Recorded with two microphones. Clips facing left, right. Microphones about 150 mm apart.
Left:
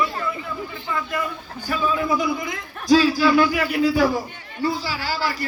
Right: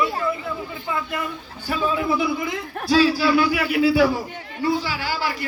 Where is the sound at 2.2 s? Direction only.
45° left (ahead or behind).